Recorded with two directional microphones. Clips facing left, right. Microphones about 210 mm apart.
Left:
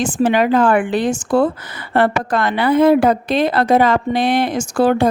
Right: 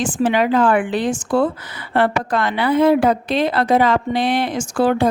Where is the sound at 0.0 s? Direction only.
45° left (ahead or behind).